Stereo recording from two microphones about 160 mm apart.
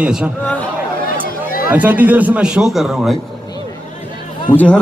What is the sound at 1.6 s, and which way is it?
A man's voice, 10° right (ahead or behind).